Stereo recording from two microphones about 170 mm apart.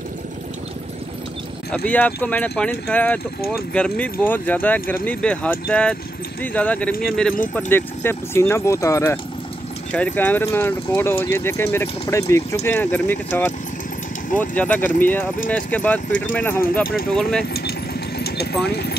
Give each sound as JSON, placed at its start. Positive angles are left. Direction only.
{"t": 1.9, "sound": "speech", "side_deg": 10}
{"t": 18.2, "sound": "vehicle", "side_deg": 70}
{"t": 18.7, "sound": "speech", "side_deg": 70}